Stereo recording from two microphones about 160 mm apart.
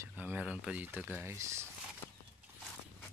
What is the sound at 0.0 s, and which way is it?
Speech, 10° right (ahead or behind).